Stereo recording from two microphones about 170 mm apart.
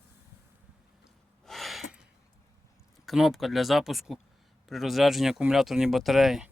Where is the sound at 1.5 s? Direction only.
Centre (ahead or behind).